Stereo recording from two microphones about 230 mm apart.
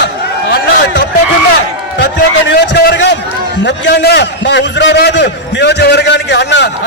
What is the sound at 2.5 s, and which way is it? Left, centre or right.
A man's voice, left.